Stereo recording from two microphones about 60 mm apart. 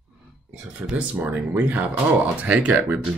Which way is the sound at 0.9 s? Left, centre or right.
Right.